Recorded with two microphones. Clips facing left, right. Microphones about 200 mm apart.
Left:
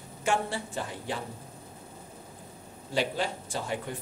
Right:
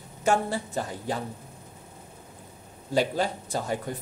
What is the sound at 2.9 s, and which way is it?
Speech, 40° right (ahead or behind).